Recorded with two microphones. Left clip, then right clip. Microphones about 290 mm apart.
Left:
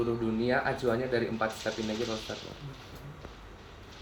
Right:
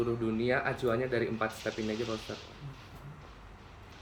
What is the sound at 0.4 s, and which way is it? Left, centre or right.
Speech, centre.